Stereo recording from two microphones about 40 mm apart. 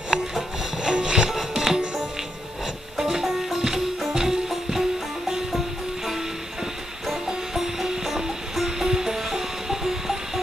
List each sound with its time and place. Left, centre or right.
0.1 s music: centre
0.8 s music: right
1.3 s music: centre
3.0 s music: centre
7.2 s music: centre